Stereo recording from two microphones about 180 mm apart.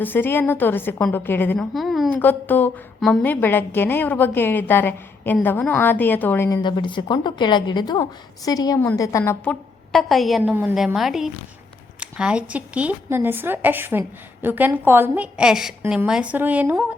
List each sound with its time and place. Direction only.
0.0 s a woman's voice: 10° left (ahead or behind)
1.7 s a woman's voice: centre (ahead or behind)
2.1 s a woman's voice: 10° left (ahead or behind)
6.6 s a woman's voice: 25° left (ahead or behind); by 10.5 s centre (ahead or behind)
10.5 s a woman's voice: 10° right (ahead or behind)